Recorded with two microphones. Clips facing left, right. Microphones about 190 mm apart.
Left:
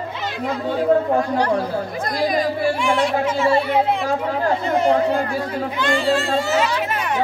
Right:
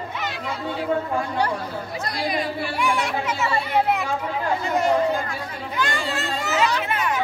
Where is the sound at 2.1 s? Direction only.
45° left (ahead or behind).